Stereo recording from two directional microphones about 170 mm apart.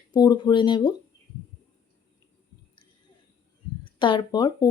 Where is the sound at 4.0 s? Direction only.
30° left (ahead or behind).